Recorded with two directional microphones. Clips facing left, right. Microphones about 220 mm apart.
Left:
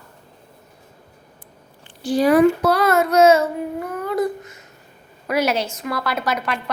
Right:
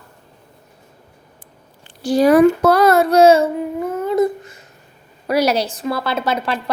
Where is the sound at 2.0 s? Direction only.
40° right (ahead or behind).